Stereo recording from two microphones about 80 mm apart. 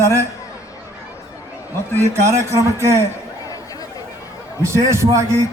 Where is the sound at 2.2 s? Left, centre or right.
Right.